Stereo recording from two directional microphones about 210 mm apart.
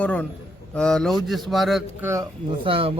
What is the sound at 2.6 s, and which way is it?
Speech, 25° right (ahead or behind).